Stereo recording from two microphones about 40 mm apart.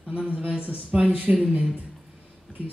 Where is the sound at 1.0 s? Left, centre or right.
Right.